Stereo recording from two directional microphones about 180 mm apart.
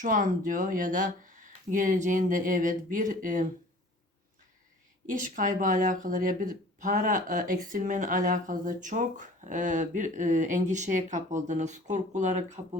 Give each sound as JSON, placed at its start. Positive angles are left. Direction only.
{"t": 0.0, "sound": "speech", "side_deg": -45}
{"t": 5.1, "sound": "speech", "side_deg": -45}